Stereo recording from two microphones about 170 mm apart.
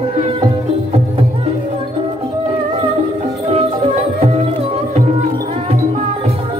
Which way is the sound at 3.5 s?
40° right (ahead or behind).